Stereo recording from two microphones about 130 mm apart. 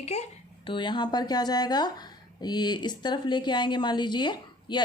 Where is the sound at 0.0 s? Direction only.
55° left (ahead or behind).